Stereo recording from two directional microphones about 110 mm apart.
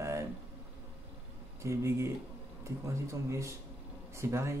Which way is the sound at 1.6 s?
25° right (ahead or behind).